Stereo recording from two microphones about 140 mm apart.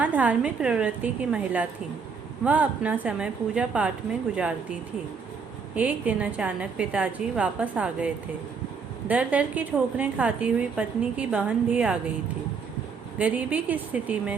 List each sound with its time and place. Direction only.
0.0 s a woman's voice: 10° right (ahead or behind)
5.7 s a woman's voice: 10° right (ahead or behind)
13.1 s a woman's voice: 10° right (ahead or behind)